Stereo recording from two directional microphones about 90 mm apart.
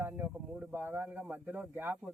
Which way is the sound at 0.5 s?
20° right (ahead or behind).